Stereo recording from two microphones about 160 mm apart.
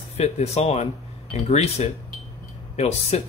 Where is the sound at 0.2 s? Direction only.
40° left (ahead or behind).